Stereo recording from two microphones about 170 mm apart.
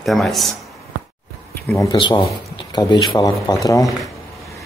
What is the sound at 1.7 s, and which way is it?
Speech, 15° left (ahead or behind).